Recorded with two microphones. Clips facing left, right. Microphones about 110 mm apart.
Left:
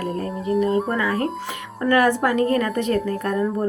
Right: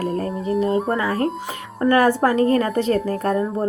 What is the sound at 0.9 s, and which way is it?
A woman's voice, 35° right (ahead or behind).